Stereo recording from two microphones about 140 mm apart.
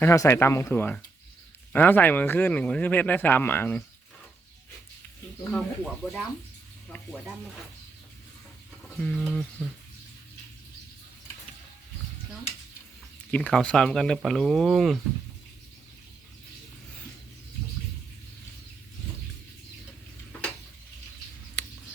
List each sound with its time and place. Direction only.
0.0 s speech: 20° left (ahead or behind)
5.5 s speech: 5° left (ahead or behind)
6.8 s sizzle: 10° left (ahead or behind)
9.0 s speech: 10° left (ahead or behind)
13.3 s speech: 5° left (ahead or behind)
21.6 s mouse: 5° left (ahead or behind)